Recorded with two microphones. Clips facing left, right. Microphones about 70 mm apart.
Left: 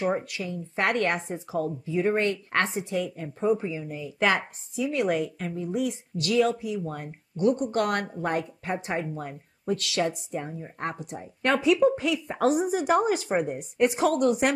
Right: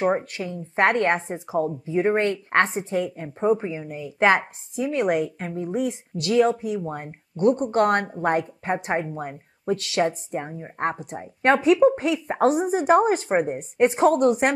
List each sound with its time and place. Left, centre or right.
0.0 s a woman's voice: right
5.0 s a woman's voice: right